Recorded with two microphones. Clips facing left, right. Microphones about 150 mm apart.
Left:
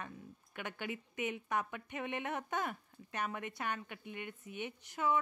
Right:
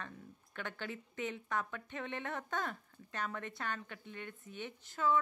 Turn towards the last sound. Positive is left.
turn(degrees=15)  # may be behind; listen again after turning